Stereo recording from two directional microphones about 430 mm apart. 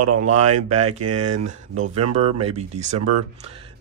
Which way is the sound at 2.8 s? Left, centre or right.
Right.